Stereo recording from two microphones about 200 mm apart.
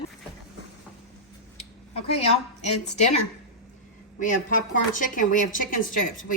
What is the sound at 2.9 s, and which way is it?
A woman's voice, 35° left (ahead or behind).